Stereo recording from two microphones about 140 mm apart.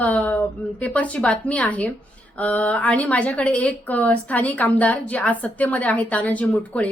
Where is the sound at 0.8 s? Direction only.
10° left (ahead or behind).